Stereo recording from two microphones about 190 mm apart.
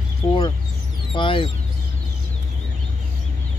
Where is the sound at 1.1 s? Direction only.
25° left (ahead or behind).